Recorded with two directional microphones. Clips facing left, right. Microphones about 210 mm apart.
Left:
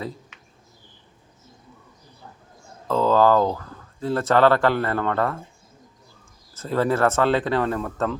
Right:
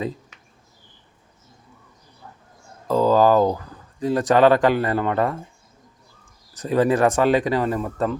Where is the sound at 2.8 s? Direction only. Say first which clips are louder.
Right 2 dB; 10° right (ahead or behind).